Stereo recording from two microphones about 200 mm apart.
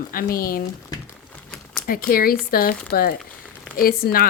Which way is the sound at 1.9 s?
45° left (ahead or behind).